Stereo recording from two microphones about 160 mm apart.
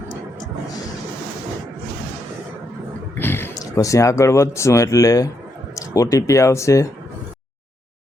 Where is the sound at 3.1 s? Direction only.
15° left (ahead or behind).